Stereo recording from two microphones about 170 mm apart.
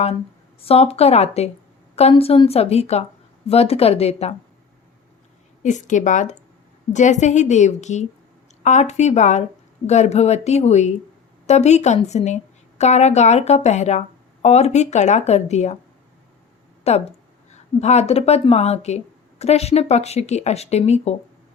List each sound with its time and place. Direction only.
0.6 s a woman's voice: 35° left (ahead or behind)
5.6 s a woman's voice: 45° left (ahead or behind)
16.8 s a woman's voice: 40° left (ahead or behind)